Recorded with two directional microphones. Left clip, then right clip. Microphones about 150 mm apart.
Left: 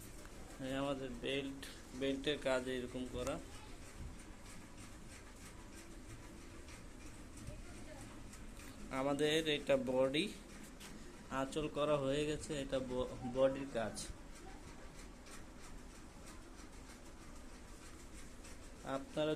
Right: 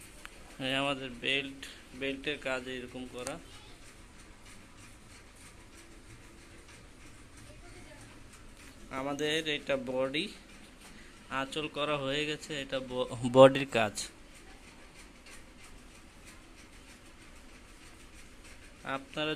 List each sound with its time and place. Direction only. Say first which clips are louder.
0.6 s speech: right 9 dB; 20° right (ahead or behind); by 3.4 s centre (ahead or behind)
8.9 s speech: right 3 dB; centre (ahead or behind)
13.3 s speech: right 15 dB; 55° right (ahead or behind)
18.9 s speech: right 4 dB; 10° right (ahead or behind)